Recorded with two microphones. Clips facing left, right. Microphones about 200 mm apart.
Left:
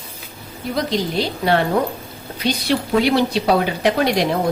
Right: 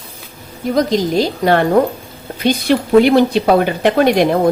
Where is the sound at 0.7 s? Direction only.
45° right (ahead or behind).